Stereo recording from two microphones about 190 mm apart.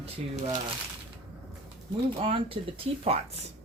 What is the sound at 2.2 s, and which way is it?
Speech, 30° right (ahead or behind).